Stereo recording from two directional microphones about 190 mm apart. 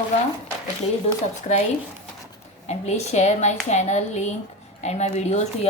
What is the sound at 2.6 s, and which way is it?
A woman's voice, 35° left (ahead or behind).